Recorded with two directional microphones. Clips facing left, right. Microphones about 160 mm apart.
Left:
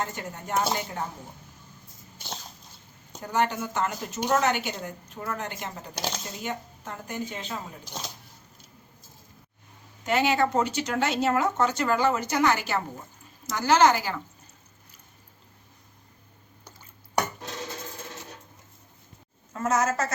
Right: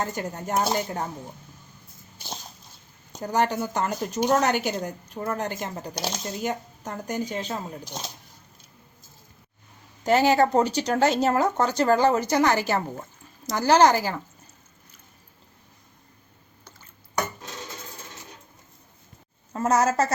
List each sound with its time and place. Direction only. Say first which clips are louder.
0.0 s speech: right 4 dB; 40° right (ahead or behind)
3.2 s speech: right 3 dB; 35° right (ahead or behind)
10.0 s speech: right 5 dB; 40° right (ahead or behind)
19.5 s speech: right 4 dB; 35° right (ahead or behind)